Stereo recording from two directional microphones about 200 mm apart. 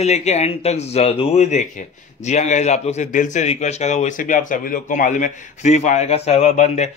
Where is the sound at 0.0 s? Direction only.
35° left (ahead or behind).